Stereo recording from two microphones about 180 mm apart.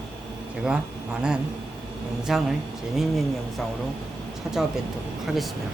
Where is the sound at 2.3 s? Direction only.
Centre (ahead or behind).